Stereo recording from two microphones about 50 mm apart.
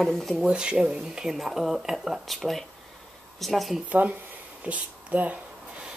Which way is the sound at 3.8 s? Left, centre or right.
Right.